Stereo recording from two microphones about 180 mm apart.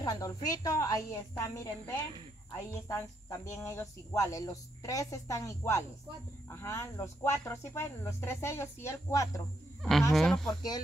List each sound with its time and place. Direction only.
0.0 s a woman's voice: 20° left (ahead or behind)
10.1 s speech: 5° left (ahead or behind)